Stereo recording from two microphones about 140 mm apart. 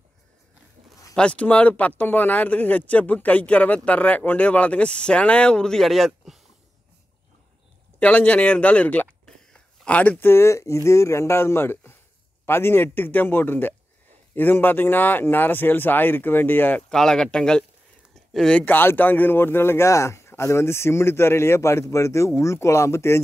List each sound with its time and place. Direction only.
1.1 s speech: 10° left (ahead or behind)
8.0 s speech: 10° left (ahead or behind)